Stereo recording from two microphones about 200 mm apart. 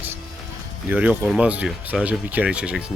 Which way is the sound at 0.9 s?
5° right (ahead or behind).